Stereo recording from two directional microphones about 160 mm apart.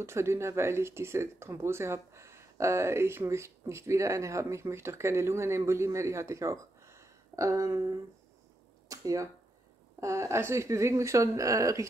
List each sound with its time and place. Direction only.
0.0 s speech: 15° right (ahead or behind)